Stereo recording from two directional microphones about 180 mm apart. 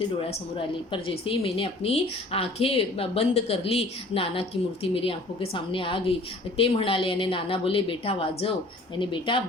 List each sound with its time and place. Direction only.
0.9 s a woman's voice: 30° left (ahead or behind)